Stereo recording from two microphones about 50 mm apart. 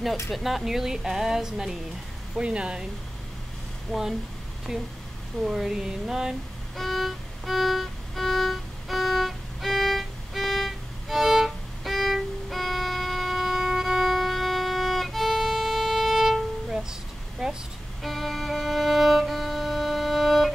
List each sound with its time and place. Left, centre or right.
0.3 s speech: centre
2.3 s speech: right
3.9 s speech: centre
6.8 s violin: centre
17.4 s vehicle: centre
18.0 s music: centre